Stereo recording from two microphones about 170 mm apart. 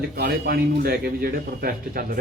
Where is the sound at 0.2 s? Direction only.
65° right (ahead or behind).